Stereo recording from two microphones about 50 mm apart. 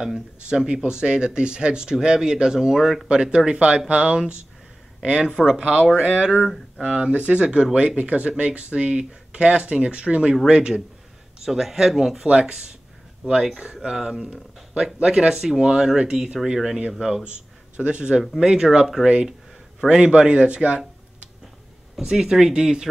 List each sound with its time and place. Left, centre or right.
0.0 s speech: centre
11.4 s speech: centre
12.3 s speech: centre
13.5 s speech: centre
14.2 s speech: right
17.2 s speech: right
18.4 s speech: centre